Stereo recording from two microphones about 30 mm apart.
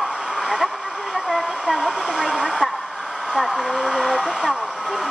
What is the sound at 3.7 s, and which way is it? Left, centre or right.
Speech, centre.